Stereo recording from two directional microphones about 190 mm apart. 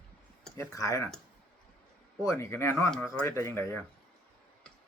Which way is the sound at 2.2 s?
15° left (ahead or behind).